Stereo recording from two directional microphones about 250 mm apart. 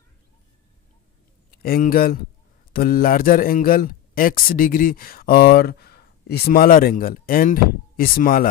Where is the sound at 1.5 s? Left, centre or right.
Left.